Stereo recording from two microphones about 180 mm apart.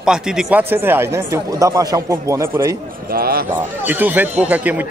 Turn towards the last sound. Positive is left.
turn(degrees=-10)  # may be behind; listen again after turning